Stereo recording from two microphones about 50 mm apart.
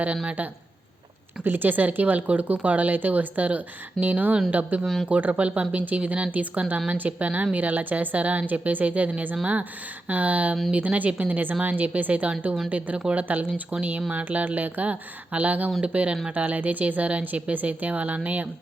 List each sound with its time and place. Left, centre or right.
1.5 s speech: right
4.8 s speech: centre
5.0 s speech: right